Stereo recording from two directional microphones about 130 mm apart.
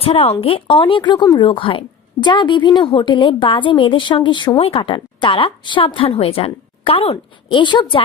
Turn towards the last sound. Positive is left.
turn(degrees=35)  # may be behind; listen again after turning